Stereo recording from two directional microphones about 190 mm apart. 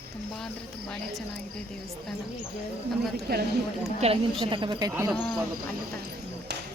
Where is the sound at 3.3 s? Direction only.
55° right (ahead or behind).